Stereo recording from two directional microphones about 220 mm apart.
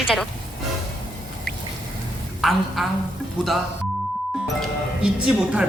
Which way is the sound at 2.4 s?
Centre (ahead or behind).